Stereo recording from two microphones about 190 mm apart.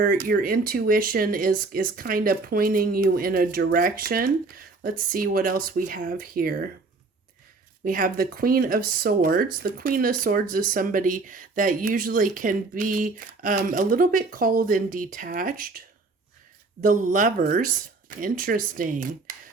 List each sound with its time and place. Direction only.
0.0 s speech: 50° right (ahead or behind)
7.9 s speech: 45° right (ahead or behind)
16.8 s speech: 45° right (ahead or behind)